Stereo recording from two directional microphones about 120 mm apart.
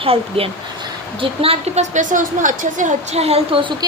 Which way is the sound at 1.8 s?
85° right.